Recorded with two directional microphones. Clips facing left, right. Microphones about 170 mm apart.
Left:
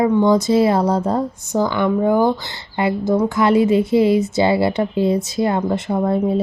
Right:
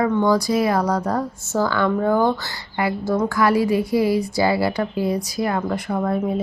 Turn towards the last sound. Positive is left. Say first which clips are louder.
# left 4 dB
turn(degrees=25)  # may be behind; listen again after turning